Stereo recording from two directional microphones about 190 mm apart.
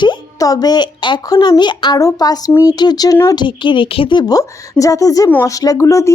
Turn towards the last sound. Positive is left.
turn(degrees=15)  # may be behind; listen again after turning